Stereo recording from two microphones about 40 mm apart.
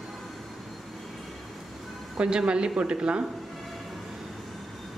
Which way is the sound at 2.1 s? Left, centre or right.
Right.